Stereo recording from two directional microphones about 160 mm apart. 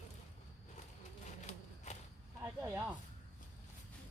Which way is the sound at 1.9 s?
45° left (ahead or behind).